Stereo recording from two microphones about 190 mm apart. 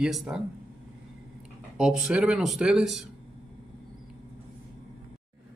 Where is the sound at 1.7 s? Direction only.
5° right (ahead or behind).